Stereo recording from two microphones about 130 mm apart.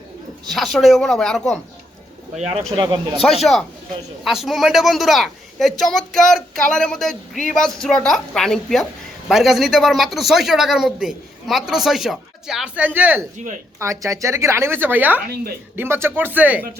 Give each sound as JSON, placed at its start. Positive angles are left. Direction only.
{"t": 0.4, "sound": "speech", "side_deg": 0}
{"t": 2.7, "sound": "speech", "side_deg": -35}
{"t": 3.2, "sound": "speech", "side_deg": 0}
{"t": 13.7, "sound": "a woman's voice", "side_deg": -25}